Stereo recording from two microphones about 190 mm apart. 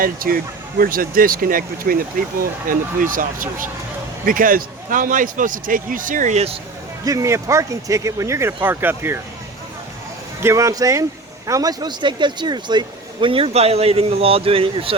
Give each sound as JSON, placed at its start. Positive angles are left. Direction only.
{"t": 0.0, "sound": "speech", "side_deg": -50}
{"t": 7.0, "sound": "speech", "side_deg": -15}
{"t": 10.4, "sound": "speech", "side_deg": -15}